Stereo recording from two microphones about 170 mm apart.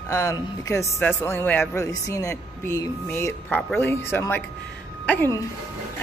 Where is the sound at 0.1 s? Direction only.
15° left (ahead or behind).